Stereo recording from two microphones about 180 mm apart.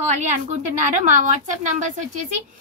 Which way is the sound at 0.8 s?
45° right (ahead or behind).